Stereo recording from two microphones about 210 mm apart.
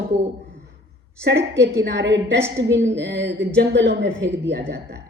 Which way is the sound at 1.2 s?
55° right (ahead or behind).